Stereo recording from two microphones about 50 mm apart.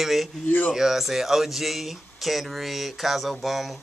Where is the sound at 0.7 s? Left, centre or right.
Centre.